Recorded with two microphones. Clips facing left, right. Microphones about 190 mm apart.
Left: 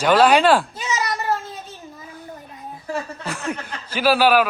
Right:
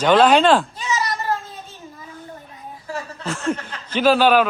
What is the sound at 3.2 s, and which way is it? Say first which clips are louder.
Speech: right 4 dB; 15° left (ahead or behind).